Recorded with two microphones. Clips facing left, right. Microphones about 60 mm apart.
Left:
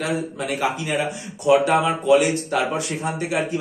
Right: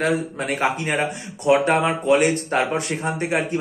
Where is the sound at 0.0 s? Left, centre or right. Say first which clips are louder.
Right 3 dB; right.